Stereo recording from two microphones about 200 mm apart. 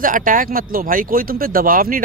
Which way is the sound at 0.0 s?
40° right (ahead or behind).